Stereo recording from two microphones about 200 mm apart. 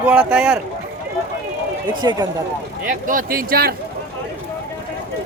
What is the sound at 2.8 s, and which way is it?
Speech, 40° right (ahead or behind).